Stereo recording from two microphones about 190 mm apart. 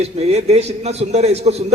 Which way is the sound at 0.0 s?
35° right (ahead or behind).